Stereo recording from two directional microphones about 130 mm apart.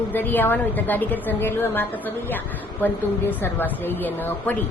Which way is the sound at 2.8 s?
15° left (ahead or behind).